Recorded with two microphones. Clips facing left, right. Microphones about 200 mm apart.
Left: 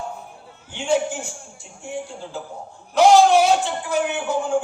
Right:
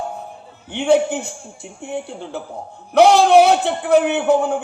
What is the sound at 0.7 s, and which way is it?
Speech, 60° right (ahead or behind).